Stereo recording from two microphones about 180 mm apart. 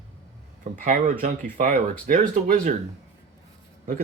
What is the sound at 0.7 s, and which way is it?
Speech, 50° right (ahead or behind).